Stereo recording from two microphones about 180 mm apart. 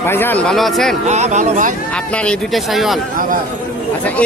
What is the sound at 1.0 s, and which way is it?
Speech, 40° right (ahead or behind).